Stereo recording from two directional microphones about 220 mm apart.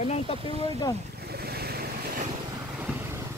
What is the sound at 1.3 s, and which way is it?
Vehicle, 45° right (ahead or behind).